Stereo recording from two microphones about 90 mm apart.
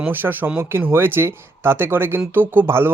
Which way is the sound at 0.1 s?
20° right (ahead or behind).